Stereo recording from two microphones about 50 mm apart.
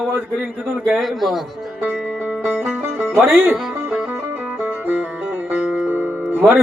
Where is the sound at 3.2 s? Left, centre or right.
Right.